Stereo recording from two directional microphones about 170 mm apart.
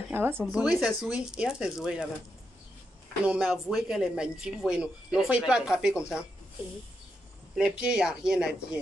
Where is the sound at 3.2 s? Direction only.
5° right (ahead or behind).